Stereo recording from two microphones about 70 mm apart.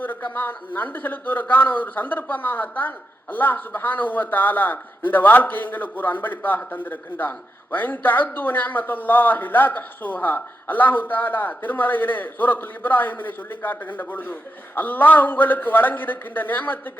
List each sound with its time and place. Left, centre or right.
0.3 s a man's voice: left